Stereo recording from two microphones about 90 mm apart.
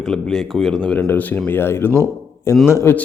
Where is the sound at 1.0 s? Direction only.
25° left (ahead or behind).